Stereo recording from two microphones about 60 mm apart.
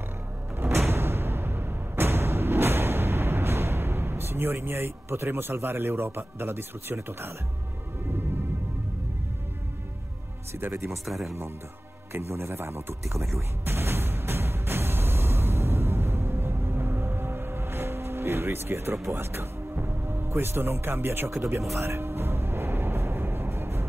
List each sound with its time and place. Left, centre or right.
0.8 s a sound: right
10.6 s speech: right
11.1 s speech: centre
12.1 s speech: right
13.7 s music: right
19.0 s a man's voice: right
21.3 s speech: right
21.7 s music: right